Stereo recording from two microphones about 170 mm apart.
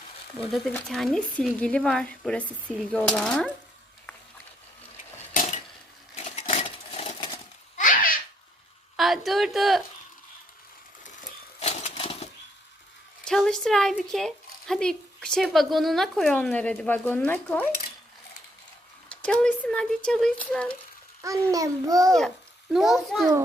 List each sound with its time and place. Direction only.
0.3 s speech: centre (ahead or behind)
5.3 s dishes: 50° left (ahead or behind)
6.1 s a sound: 40° left (ahead or behind)
7.8 s babbling: 55° left (ahead or behind)
9.0 s a sound: centre (ahead or behind)
11.6 s bird flight: 40° left (ahead or behind)
13.2 s speech: 5° left (ahead or behind)
19.0 s speech: 5° left (ahead or behind)
21.5 s a child's voice: 20° right (ahead or behind)
22.7 s speech: centre (ahead or behind)